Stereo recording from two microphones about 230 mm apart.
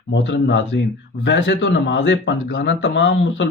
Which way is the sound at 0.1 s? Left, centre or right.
Left.